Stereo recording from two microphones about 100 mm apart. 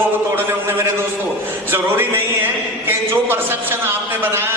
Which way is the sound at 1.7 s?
20° right (ahead or behind).